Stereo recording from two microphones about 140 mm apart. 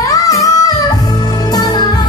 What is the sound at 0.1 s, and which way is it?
Music, 25° left (ahead or behind).